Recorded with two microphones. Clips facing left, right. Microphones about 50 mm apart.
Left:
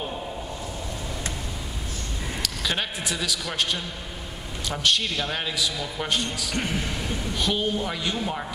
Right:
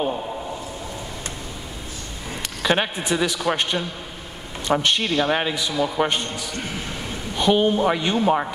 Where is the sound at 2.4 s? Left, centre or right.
Right.